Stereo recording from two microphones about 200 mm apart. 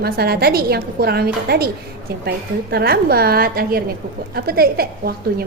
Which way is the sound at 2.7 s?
50° right (ahead or behind).